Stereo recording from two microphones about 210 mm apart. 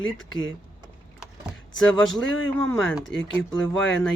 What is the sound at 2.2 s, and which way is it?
Speech, 60° left (ahead or behind).